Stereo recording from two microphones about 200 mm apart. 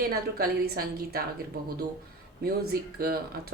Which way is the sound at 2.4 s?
50° right (ahead or behind).